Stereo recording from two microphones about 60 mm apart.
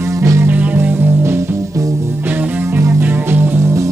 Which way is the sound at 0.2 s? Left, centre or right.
Right.